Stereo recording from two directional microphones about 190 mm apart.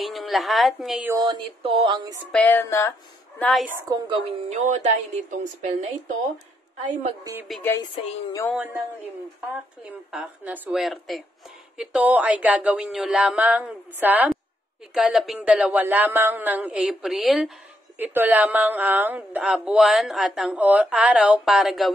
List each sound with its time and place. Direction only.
0.0 s speech: centre (ahead or behind)
1.1 s speech: 25° right (ahead or behind)
2.3 s speech: 10° left (ahead or behind)
3.8 s speech: 20° right (ahead or behind)
4.5 s a woman's voice: 40° right (ahead or behind)
7.6 s speech: 15° left (ahead or behind)
10.1 s speech: 5° right (ahead or behind)
11.7 s a sound: 5° right (ahead or behind)
15.0 s speech: centre (ahead or behind)